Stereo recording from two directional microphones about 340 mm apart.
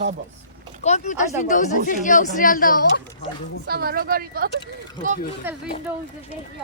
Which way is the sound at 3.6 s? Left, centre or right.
Right.